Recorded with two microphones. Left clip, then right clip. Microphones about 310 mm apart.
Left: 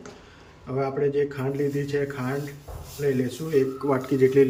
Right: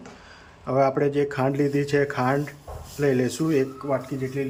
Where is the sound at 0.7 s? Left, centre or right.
Centre.